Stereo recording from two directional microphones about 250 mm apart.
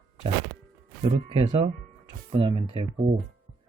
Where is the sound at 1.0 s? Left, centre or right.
Right.